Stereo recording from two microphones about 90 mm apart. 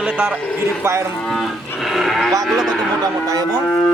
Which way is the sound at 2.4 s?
Centre (ahead or behind).